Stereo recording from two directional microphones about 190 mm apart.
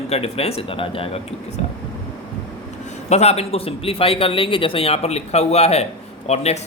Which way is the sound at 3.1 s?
35° left (ahead or behind).